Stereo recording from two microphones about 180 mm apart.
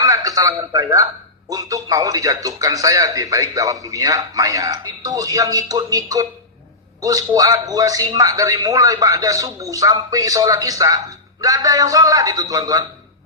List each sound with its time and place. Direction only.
0.0 s a man's voice: 20° right (ahead or behind)